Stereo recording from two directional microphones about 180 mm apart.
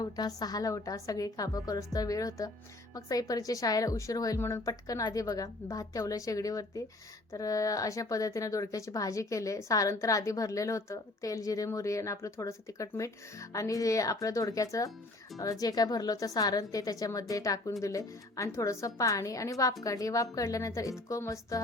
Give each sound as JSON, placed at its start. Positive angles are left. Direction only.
{"t": 0.0, "sound": "a woman's voice", "side_deg": 20}